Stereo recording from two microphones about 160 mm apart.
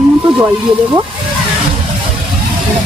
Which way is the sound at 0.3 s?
10° right (ahead or behind).